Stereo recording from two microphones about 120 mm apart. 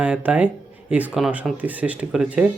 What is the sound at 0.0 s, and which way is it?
Speech, 10° right (ahead or behind).